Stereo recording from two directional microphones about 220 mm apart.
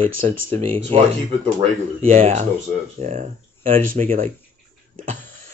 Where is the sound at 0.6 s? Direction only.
25° right (ahead or behind).